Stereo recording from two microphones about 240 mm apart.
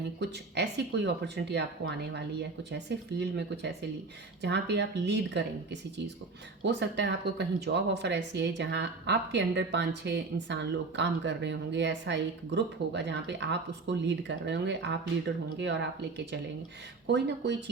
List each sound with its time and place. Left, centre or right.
0.2 s speech: right
6.6 s speech: right